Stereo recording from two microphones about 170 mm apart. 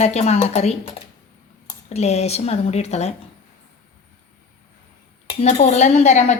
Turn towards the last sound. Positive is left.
turn(degrees=40)  # may be behind; listen again after turning